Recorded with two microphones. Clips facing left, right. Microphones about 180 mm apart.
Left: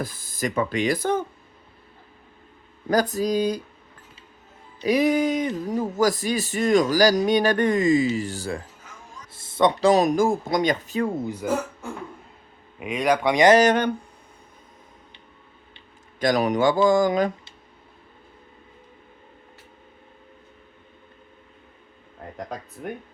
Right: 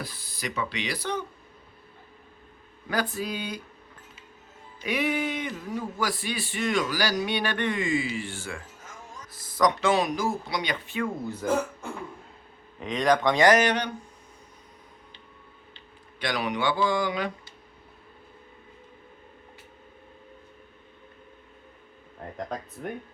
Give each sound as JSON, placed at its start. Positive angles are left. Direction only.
{"t": 0.0, "sound": "speech", "side_deg": 45}
{"t": 2.9, "sound": "speech", "side_deg": 40}
{"t": 4.8, "sound": "speech", "side_deg": 40}
{"t": 9.3, "sound": "a sound", "side_deg": 25}
{"t": 9.9, "sound": "speech", "side_deg": 45}
{"t": 11.3, "sound": "speech", "side_deg": 10}
{"t": 12.8, "sound": "speech", "side_deg": 10}
{"t": 13.6, "sound": "speech", "side_deg": 50}
{"t": 16.2, "sound": "speech", "side_deg": 45}
{"t": 22.4, "sound": "speech", "side_deg": 0}